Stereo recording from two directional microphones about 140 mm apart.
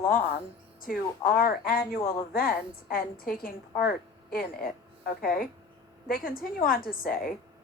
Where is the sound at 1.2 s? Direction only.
90° left.